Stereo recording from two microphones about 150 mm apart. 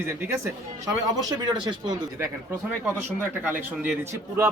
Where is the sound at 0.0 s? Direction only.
15° right (ahead or behind).